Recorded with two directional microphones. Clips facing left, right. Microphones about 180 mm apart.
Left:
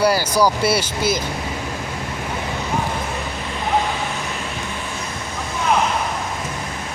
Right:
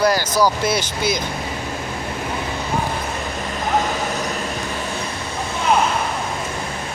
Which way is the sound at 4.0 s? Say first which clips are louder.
Right 3 dB; 40° right (ahead or behind).